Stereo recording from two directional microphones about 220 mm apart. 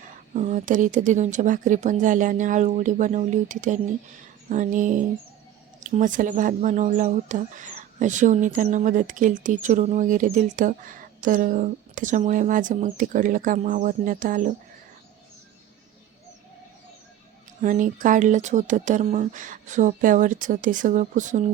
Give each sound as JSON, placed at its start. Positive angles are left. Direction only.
{"t": 0.3, "sound": "speech", "side_deg": -35}
{"t": 17.6, "sound": "speech", "side_deg": -35}